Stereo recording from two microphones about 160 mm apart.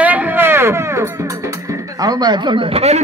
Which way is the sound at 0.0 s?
10° right (ahead or behind).